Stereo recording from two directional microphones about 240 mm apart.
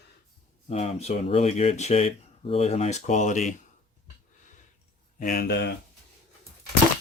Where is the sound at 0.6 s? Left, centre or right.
Left.